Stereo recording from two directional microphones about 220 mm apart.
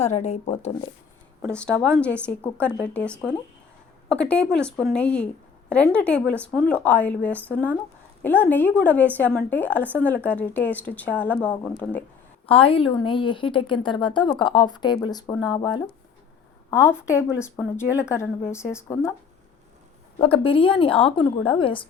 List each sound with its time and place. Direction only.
0.0 s speech: 30° left (ahead or behind)
1.4 s a woman's voice: 5° left (ahead or behind)
12.5 s a woman's voice: 25° left (ahead or behind)
20.1 s a woman's voice: 25° left (ahead or behind)